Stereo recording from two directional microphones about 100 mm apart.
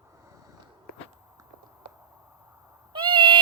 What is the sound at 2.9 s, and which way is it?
Owl, 55° right (ahead or behind).